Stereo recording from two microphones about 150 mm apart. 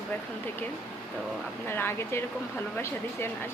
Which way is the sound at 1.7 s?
15° left (ahead or behind).